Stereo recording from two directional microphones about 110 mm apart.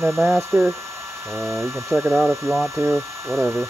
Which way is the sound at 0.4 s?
25° right (ahead or behind).